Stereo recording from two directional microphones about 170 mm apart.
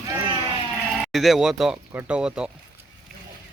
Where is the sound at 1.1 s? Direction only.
Centre (ahead or behind).